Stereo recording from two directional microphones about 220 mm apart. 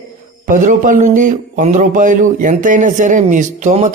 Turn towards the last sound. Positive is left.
turn(degrees=-35)  # may be behind; listen again after turning